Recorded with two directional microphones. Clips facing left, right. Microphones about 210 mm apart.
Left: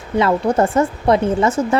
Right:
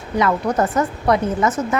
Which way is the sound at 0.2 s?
30° left (ahead or behind).